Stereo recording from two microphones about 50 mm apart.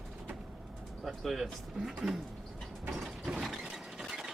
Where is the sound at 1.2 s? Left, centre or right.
Centre.